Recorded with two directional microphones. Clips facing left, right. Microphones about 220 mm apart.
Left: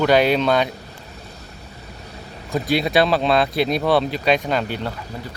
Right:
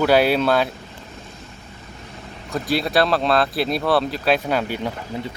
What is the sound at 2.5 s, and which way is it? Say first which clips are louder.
Speech: left 2 dB; centre (ahead or behind).